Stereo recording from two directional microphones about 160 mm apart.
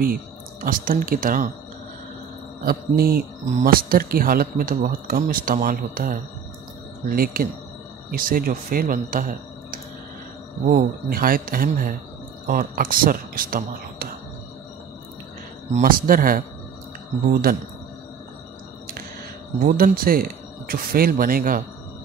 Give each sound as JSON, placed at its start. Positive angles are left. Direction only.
{"t": 0.7, "sound": "speech", "side_deg": -60}
{"t": 2.6, "sound": "mantra", "side_deg": -65}
{"t": 3.4, "sound": "speech", "side_deg": -65}
{"t": 15.8, "sound": "speech", "side_deg": -60}
{"t": 19.6, "sound": "speech", "side_deg": -65}